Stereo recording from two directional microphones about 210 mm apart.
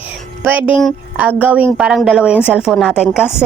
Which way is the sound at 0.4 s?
10° right (ahead or behind).